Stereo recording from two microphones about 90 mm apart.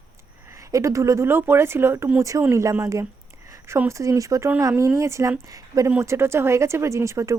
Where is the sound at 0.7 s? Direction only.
35° right (ahead or behind).